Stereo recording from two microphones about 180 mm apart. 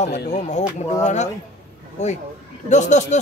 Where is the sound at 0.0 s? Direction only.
40° left (ahead or behind).